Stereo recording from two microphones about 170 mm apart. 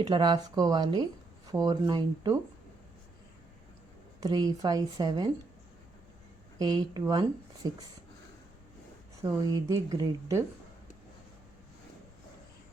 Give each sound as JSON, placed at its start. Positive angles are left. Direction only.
{"t": 0.0, "sound": "speech", "side_deg": -30}
{"t": 4.2, "sound": "speech", "side_deg": -20}
{"t": 6.6, "sound": "speech", "side_deg": -25}
{"t": 9.2, "sound": "speech", "side_deg": -20}